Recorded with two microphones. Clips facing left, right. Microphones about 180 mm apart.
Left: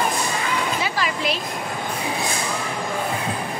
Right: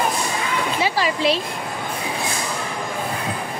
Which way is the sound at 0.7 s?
30° right (ahead or behind).